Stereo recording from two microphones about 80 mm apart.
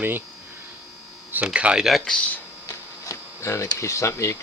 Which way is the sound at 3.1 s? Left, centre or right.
Left.